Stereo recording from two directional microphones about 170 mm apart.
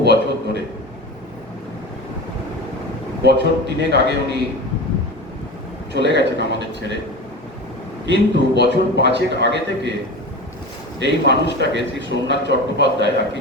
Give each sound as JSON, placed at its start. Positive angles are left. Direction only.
{"t": 0.0, "sound": "a sound", "side_deg": -75}
{"t": 3.2, "sound": "a man's voice", "side_deg": -75}
{"t": 5.9, "sound": "a man's voice", "side_deg": -85}
{"t": 8.0, "sound": "a man's voice", "side_deg": -90}
{"t": 11.0, "sound": "a man's voice", "side_deg": -85}